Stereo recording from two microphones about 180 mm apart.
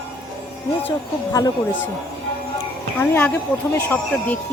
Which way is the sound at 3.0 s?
10° left (ahead or behind).